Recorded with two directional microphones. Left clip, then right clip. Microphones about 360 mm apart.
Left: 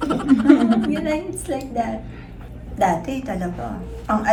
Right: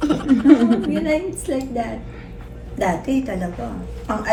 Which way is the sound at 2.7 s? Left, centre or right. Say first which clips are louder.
Left 1 dB; centre.